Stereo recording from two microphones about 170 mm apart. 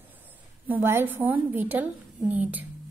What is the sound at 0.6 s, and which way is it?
A woman's voice, 10° right (ahead or behind).